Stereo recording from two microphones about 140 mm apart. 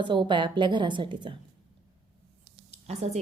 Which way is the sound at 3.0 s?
50° right (ahead or behind).